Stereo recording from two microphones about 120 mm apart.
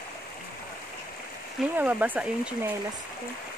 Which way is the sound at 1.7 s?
15° right (ahead or behind).